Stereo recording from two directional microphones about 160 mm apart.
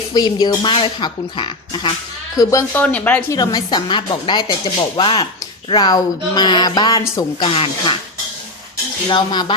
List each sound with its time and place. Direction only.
0.1 s a woman's voice: 25° left (ahead or behind)
2.8 s speech: 10° left (ahead or behind)
3.3 s a woman's voice: 25° left (ahead or behind)
7.4 s speech: 35° left (ahead or behind)
9.0 s a woman's voice: 30° left (ahead or behind)